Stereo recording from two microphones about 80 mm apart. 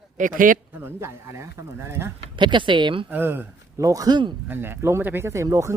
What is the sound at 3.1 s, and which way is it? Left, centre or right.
Speech, right.